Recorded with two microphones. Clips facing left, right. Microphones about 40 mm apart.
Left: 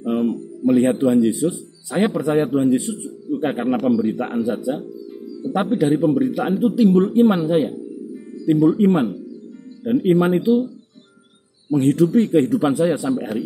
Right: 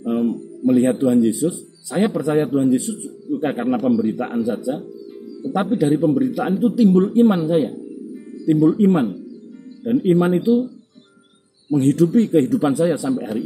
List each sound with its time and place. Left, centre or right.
0.0 s music: left
1.0 s speech: centre
2.1 s speech: centre
5.1 s music: centre
5.5 s speech: centre
8.1 s music: centre
8.5 s speech: left
11.7 s speech: left